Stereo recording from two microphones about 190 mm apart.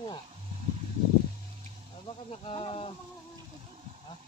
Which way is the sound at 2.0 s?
25° left (ahead or behind).